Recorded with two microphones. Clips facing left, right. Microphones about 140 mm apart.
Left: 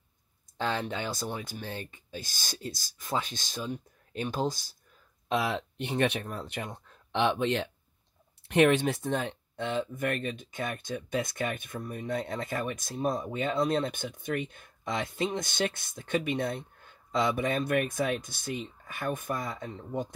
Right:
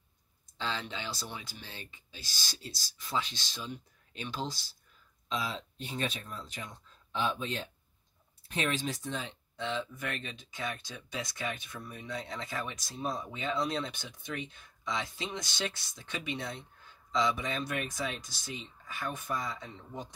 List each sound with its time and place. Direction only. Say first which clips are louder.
0.6 s speech: left 6 dB; 55° left (ahead or behind)
5.3 s speech: left 7 dB; 65° left (ahead or behind)